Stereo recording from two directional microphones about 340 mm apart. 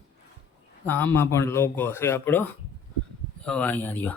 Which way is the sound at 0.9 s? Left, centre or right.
Centre.